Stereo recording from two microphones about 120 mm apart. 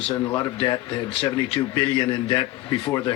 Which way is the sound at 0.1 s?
15° left (ahead or behind).